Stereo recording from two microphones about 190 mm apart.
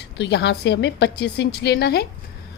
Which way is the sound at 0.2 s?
65° left (ahead or behind).